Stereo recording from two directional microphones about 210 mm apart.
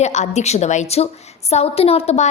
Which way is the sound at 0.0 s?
35° left (ahead or behind).